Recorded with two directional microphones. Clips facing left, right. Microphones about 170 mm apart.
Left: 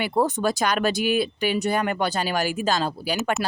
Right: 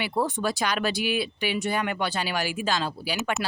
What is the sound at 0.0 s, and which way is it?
Speech, 45° left (ahead or behind).